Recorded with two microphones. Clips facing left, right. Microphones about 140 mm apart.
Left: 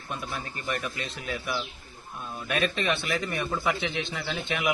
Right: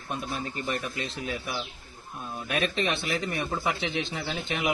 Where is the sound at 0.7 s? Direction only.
30° right (ahead or behind).